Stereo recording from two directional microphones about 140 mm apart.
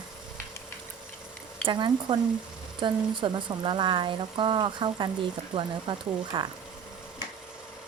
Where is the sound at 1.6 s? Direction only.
35° right (ahead or behind).